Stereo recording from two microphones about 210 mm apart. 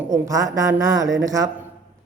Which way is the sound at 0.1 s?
15° right (ahead or behind).